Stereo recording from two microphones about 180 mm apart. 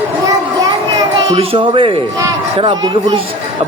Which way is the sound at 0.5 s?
20° right (ahead or behind).